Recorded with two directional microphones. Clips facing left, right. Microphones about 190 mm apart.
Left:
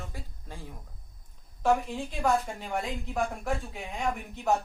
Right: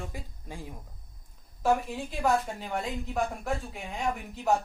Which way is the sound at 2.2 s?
5° right (ahead or behind).